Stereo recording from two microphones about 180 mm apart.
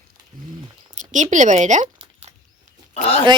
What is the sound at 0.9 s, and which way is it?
Speech, 45° right (ahead or behind).